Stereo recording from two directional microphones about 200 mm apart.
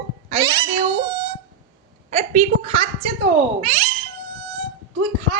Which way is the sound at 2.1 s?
35° right (ahead or behind).